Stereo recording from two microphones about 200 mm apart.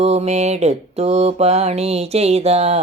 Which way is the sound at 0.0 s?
30° right (ahead or behind).